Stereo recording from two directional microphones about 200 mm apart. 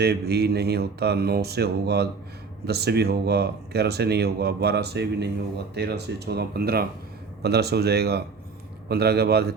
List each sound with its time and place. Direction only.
0.0 s speech: 55° right (ahead or behind)